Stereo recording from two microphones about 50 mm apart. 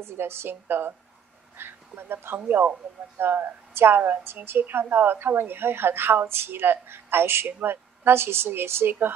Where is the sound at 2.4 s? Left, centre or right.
Right.